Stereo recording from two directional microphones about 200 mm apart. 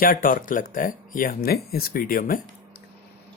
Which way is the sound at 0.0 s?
45° left (ahead or behind).